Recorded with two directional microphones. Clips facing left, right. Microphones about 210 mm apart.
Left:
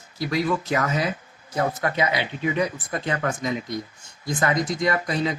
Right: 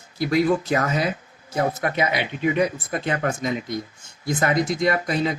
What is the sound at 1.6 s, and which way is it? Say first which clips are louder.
Speech: right 1 dB; 20° right (ahead or behind).